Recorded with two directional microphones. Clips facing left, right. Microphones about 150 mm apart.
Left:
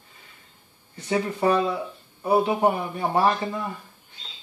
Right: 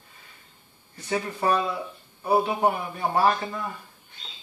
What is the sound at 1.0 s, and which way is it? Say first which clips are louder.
Speech: left 3 dB; 25° left (ahead or behind).